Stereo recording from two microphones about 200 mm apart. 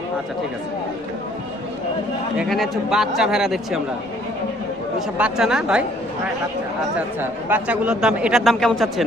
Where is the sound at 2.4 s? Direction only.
Centre (ahead or behind).